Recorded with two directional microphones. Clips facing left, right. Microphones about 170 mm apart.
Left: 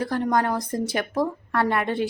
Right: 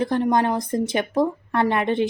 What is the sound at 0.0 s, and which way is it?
A woman's voice, 20° right (ahead or behind).